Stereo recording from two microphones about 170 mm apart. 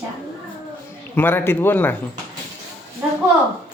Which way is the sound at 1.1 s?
10° left (ahead or behind).